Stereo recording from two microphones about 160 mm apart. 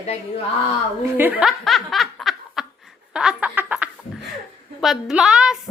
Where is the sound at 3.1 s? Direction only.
5° right (ahead or behind).